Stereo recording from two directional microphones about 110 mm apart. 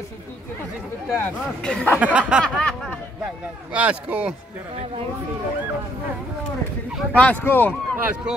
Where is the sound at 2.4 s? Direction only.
5° left (ahead or behind).